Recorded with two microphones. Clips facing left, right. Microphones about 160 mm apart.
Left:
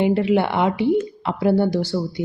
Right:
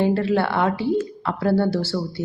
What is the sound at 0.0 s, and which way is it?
A woman's voice, 15° left (ahead or behind).